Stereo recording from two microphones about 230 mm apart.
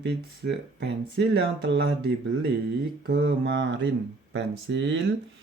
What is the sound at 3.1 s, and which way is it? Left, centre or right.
Speech, right.